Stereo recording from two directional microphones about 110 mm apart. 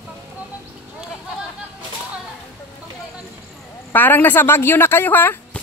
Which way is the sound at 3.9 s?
20° left (ahead or behind).